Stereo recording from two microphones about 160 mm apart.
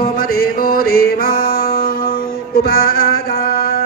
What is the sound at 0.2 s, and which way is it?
Music, 65° left (ahead or behind).